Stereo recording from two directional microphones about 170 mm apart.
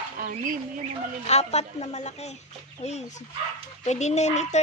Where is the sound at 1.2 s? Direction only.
40° left (ahead or behind).